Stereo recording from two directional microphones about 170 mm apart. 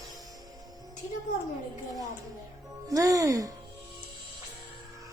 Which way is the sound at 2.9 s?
20° right (ahead or behind).